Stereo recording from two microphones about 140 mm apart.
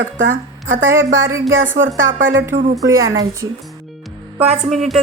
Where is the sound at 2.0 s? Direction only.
75° right (ahead or behind).